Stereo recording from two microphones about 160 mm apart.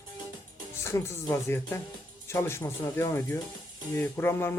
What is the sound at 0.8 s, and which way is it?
Speech, 20° left (ahead or behind).